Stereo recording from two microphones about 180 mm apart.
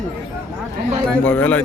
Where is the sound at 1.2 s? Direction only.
10° left (ahead or behind).